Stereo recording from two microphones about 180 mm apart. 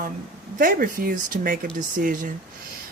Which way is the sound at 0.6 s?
50° right (ahead or behind).